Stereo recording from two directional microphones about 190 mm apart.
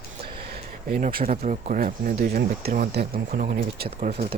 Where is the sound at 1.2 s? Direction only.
40° right (ahead or behind).